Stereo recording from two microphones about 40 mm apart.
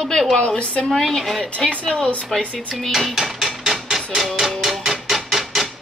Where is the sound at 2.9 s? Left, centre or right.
Centre.